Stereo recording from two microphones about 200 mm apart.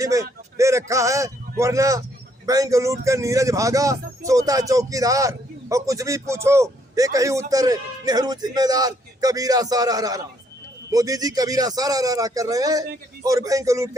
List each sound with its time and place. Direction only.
0.0 s speech: 15° right (ahead or behind)